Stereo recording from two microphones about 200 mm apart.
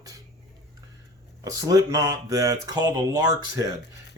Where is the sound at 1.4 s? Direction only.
20° right (ahead or behind).